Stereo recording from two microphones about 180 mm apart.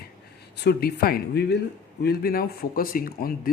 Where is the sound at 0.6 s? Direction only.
65° left (ahead or behind).